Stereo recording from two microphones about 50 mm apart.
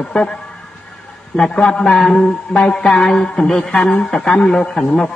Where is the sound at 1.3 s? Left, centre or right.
Centre.